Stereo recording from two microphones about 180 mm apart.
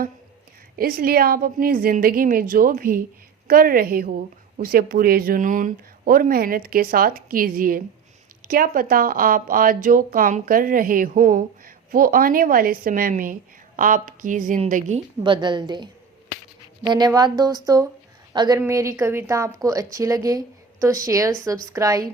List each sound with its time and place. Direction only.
0.8 s speech: 55° right (ahead or behind)
15.2 s speech: 25° right (ahead or behind)